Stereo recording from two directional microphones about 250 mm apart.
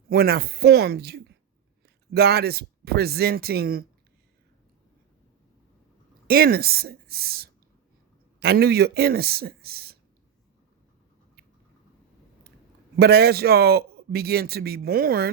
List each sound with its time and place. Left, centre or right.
0.1 s a man's voice: right
6.2 s a man's voice: right
13.0 s a man's voice: right